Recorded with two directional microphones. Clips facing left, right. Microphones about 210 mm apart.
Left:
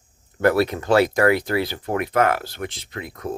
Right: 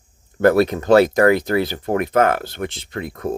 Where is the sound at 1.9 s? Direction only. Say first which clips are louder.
Right 3 dB; 35° right (ahead or behind).